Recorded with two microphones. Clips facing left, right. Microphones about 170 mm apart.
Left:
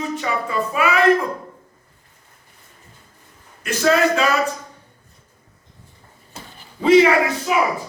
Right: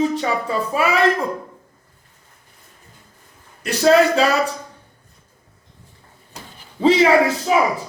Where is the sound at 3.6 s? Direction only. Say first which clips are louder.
Right 3 dB; 35° right (ahead or behind).